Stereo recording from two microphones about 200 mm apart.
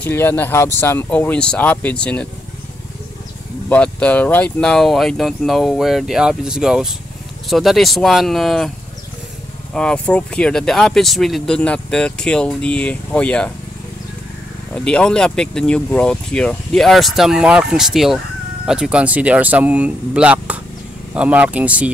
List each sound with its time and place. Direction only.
0.0 s speech: 10° left (ahead or behind)
3.6 s speech: 5° left (ahead or behind)
9.8 s speech: 5° left (ahead or behind)
14.7 s speech: 5° left (ahead or behind)